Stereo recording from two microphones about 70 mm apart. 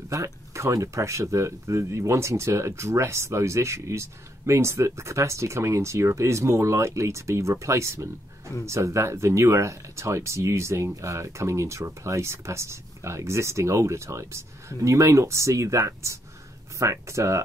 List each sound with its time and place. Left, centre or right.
0.1 s speech: right